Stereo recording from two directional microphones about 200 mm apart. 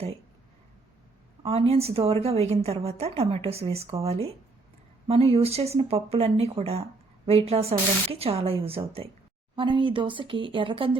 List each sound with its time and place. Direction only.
1.4 s speech: 30° right (ahead or behind)